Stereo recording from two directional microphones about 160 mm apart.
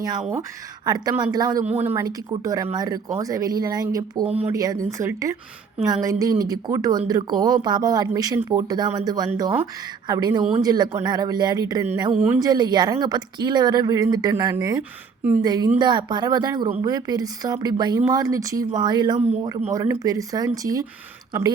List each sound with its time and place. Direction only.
0.0 s speech: 20° right (ahead or behind)
15.2 s a woman's voice: 10° right (ahead or behind)
15.4 s speech: 25° right (ahead or behind)